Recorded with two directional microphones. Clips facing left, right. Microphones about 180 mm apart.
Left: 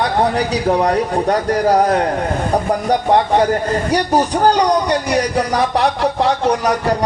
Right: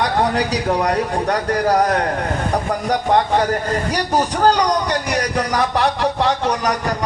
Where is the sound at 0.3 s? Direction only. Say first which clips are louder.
Left 3 dB; 30° left (ahead or behind).